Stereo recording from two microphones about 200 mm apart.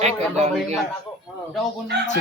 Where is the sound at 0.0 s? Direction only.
35° right (ahead or behind).